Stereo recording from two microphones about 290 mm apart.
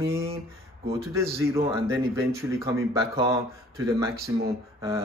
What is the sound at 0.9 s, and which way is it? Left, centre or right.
Speech, centre.